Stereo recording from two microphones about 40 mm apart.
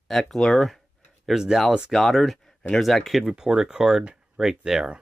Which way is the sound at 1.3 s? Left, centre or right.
Centre.